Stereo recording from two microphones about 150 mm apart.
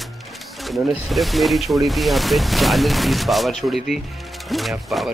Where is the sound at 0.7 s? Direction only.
Centre (ahead or behind).